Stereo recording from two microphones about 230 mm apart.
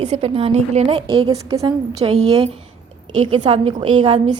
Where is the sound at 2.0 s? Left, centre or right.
Right.